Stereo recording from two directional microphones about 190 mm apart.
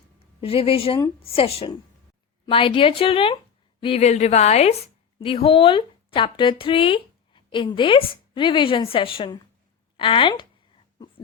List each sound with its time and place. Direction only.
0.4 s a woman's voice: 30° left (ahead or behind)